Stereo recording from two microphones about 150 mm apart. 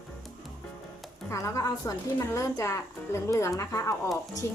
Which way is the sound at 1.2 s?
20° left (ahead or behind).